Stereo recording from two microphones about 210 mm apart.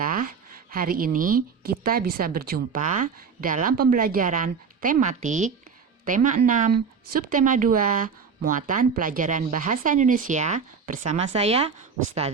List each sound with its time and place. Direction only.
0.0 s speech: 40° right (ahead or behind)